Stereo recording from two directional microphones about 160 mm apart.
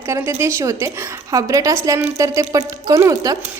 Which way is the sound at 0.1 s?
15° right (ahead or behind).